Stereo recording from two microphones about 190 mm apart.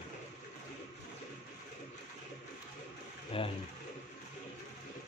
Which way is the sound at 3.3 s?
30° left (ahead or behind).